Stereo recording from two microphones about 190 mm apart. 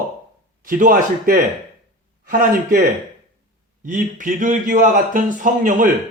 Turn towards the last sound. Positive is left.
turn(degrees=-45)  # may be behind; listen again after turning